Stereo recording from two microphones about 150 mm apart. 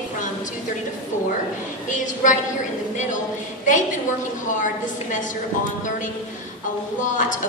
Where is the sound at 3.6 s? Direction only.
55° left (ahead or behind).